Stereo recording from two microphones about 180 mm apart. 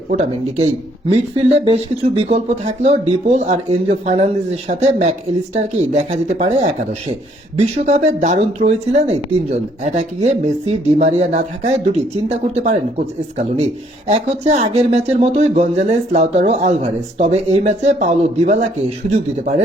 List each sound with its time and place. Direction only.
0.1 s speech: 35° right (ahead or behind)
14.1 s speech: 40° right (ahead or behind)